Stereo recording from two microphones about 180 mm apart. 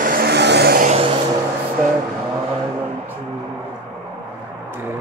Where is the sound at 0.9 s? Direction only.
30° right (ahead or behind).